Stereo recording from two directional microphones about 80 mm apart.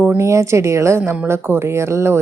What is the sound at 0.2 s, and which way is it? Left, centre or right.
Speech, right.